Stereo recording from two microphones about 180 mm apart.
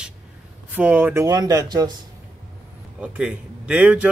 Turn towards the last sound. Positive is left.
turn(degrees=-5)  # may be behind; listen again after turning